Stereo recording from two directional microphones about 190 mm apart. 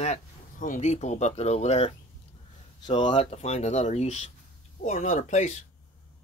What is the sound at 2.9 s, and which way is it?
Speech, 25° left (ahead or behind).